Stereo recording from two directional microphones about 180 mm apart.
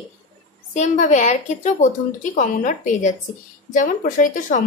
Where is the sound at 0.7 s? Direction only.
40° left (ahead or behind).